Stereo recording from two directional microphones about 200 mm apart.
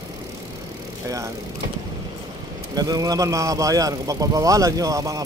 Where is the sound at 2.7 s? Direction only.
20° right (ahead or behind).